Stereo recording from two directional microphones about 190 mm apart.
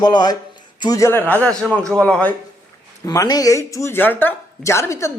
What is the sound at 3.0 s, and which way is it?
Speech, 20° left (ahead or behind).